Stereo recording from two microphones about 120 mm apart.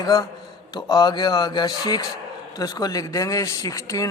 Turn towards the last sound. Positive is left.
turn(degrees=25)  # may be behind; listen again after turning